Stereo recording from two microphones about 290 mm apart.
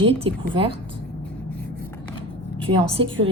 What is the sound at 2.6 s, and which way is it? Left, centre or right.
Speech, centre.